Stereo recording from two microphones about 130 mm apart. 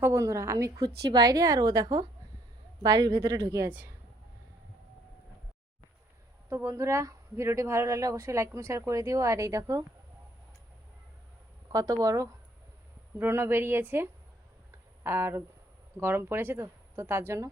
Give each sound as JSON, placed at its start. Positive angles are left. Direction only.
{"t": 0.0, "sound": "speech", "side_deg": -20}
{"t": 6.5, "sound": "speech", "side_deg": -20}
{"t": 11.7, "sound": "a woman's voice", "side_deg": -25}